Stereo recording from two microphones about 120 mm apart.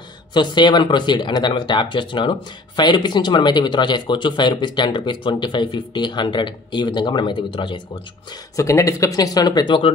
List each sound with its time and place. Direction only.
0.3 s speech: 40° left (ahead or behind)
8.5 s speech: 25° left (ahead or behind)